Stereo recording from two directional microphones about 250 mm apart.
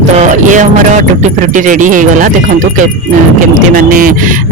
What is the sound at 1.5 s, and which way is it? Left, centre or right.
Speech, right.